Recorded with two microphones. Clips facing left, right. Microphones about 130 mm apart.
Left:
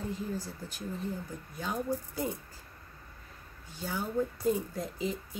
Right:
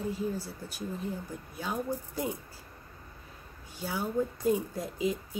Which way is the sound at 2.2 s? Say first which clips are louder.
Right 1 dB; 10° right (ahead or behind).